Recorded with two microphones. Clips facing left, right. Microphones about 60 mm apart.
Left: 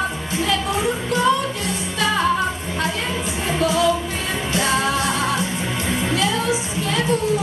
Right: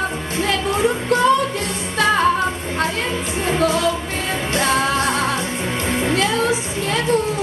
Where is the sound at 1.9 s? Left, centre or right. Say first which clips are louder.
Right 4 dB; right.